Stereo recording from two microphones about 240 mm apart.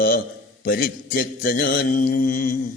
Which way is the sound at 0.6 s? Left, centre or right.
Left.